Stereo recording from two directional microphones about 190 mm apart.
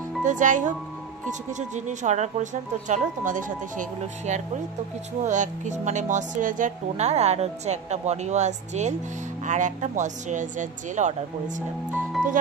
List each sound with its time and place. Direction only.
0.2 s speech: 40° right (ahead or behind)